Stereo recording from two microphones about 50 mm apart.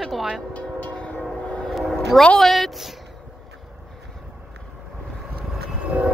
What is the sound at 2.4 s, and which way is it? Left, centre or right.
Speech, centre.